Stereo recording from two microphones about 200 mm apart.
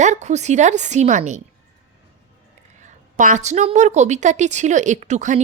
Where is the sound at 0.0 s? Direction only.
35° right (ahead or behind).